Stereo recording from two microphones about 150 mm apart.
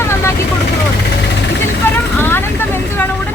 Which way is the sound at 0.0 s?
15° left (ahead or behind).